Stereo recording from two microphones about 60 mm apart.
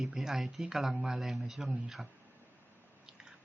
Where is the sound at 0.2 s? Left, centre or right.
Centre.